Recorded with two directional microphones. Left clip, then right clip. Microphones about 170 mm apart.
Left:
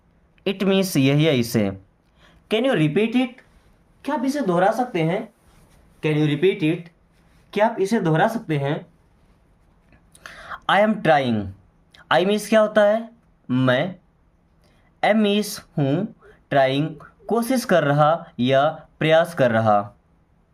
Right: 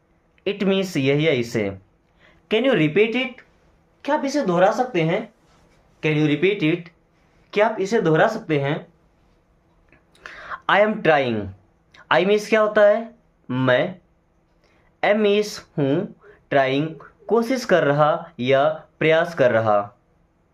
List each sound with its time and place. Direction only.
0.4 s speech: 55° left (ahead or behind); by 8.8 s 35° left (ahead or behind)
9.9 s a sound: 40° left (ahead or behind)
11.9 s speech: 35° left (ahead or behind)
15.0 s speech: 35° left (ahead or behind)